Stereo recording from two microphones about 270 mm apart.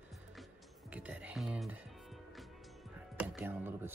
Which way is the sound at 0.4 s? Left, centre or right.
Centre.